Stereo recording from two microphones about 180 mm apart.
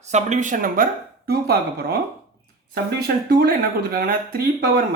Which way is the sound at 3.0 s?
60° right (ahead or behind).